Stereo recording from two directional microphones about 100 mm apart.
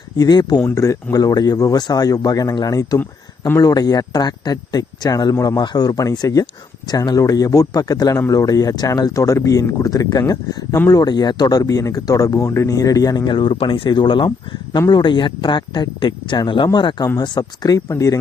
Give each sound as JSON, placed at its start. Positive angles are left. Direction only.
{"t": 0.2, "sound": "speech", "side_deg": 40}
{"t": 3.0, "sound": "speech", "side_deg": 20}
{"t": 3.6, "sound": "speech", "side_deg": 40}
{"t": 11.0, "sound": "speech", "side_deg": 45}